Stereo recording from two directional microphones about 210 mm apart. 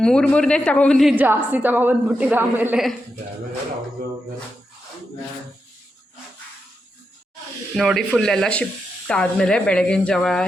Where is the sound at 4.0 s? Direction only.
45° right (ahead or behind).